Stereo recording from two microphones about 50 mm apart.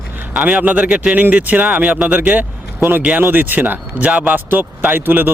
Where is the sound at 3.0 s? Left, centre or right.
Right.